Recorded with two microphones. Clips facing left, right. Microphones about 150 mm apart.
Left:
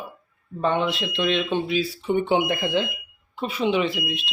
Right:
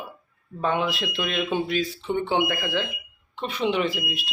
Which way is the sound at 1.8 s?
15° left (ahead or behind).